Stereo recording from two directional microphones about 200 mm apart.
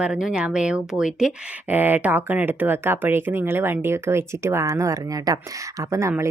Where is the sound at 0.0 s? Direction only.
5° right (ahead or behind).